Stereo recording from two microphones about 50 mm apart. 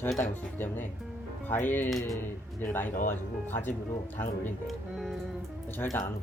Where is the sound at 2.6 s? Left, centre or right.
Left.